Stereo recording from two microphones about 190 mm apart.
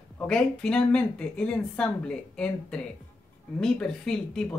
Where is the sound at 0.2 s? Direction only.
5° left (ahead or behind).